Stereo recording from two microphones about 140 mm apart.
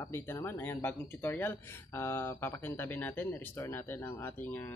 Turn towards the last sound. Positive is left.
turn(degrees=15)  # may be behind; listen again after turning